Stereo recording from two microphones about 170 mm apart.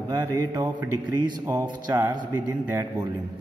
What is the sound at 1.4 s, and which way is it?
Speech, 10° right (ahead or behind).